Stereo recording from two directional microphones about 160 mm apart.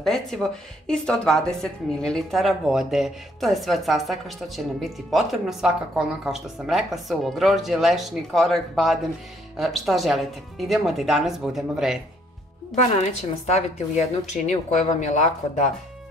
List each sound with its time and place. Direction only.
0.0 s speech: centre (ahead or behind)
13.0 s speech: 45° left (ahead or behind)